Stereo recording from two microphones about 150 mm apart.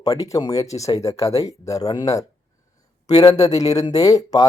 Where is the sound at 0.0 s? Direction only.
25° left (ahead or behind).